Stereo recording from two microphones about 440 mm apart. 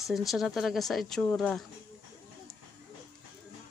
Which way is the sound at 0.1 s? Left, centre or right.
Centre.